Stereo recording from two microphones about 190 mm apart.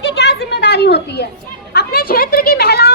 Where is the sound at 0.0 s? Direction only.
65° left (ahead or behind).